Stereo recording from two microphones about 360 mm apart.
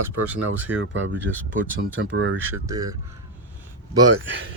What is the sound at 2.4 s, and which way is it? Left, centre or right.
Speech, centre.